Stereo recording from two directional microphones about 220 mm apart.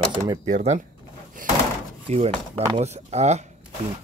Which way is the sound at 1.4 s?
40° right (ahead or behind).